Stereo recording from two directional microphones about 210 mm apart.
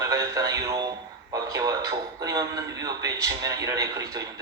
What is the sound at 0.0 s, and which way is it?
Speech, 15° right (ahead or behind).